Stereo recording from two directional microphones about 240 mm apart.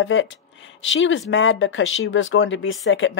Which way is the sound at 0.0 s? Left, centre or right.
Left.